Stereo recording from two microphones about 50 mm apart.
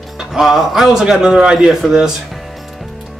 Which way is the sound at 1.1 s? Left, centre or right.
Centre.